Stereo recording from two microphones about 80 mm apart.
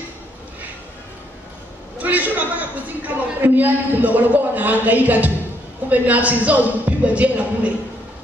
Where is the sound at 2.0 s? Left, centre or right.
Centre.